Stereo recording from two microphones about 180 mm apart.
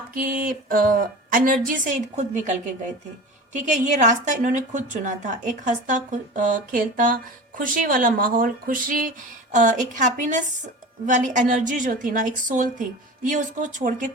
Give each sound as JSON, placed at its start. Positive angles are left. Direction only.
{"t": 0.1, "sound": "a woman's voice", "side_deg": -55}